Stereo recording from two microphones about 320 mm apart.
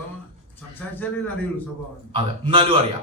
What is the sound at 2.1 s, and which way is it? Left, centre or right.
Speech, centre.